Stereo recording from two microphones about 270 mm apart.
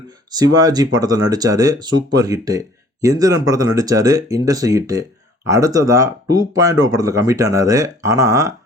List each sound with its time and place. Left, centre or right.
0.3 s speech: centre